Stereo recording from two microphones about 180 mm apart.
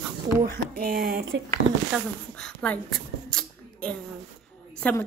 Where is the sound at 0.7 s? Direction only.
60° right (ahead or behind).